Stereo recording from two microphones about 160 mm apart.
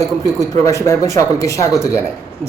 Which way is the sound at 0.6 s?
20° left (ahead or behind).